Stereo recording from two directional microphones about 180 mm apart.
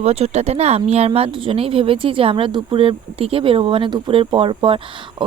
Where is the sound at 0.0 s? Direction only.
35° right (ahead or behind).